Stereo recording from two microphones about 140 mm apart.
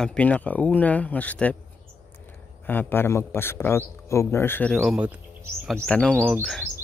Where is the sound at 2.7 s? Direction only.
15° left (ahead or behind).